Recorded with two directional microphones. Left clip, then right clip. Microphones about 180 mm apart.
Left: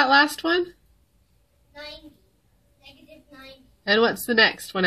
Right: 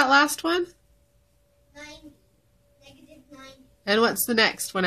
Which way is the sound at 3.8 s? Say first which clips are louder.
Left 2 dB; 5° right (ahead or behind).